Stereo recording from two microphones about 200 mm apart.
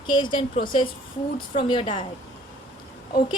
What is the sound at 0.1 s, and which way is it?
A woman's voice, 25° left (ahead or behind).